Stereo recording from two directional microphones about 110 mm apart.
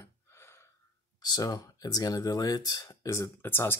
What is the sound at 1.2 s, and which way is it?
Speech, 35° left (ahead or behind).